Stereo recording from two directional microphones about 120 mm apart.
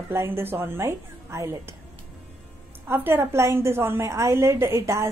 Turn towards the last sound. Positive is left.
turn(degrees=-25)  # may be behind; listen again after turning